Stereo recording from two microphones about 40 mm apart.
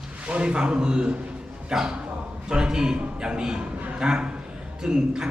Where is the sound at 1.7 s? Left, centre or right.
Centre.